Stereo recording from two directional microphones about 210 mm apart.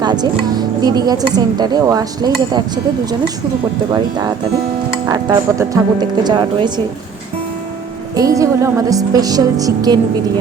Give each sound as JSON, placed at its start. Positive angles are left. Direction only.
{"t": 0.0, "sound": "music", "side_deg": -20}
{"t": 0.8, "sound": "speech", "side_deg": -20}
{"t": 5.0, "sound": "speech", "side_deg": -15}
{"t": 8.1, "sound": "speech", "side_deg": -15}